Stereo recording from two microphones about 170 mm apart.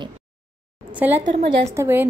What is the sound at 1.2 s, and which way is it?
Speech, 45° right (ahead or behind).